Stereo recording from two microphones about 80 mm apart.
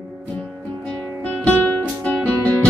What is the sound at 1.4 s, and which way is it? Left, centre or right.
Music, centre.